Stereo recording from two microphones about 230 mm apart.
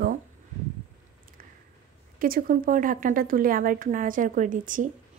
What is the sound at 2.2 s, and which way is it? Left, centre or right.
A woman's voice, right.